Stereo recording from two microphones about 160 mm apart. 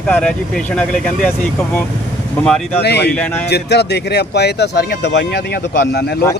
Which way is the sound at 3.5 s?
90° left.